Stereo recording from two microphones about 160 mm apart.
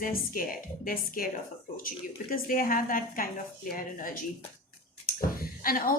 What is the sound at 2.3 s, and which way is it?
A woman's voice, 60° left (ahead or behind).